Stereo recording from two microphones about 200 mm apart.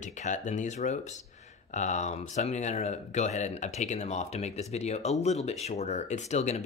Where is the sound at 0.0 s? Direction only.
35° left (ahead or behind).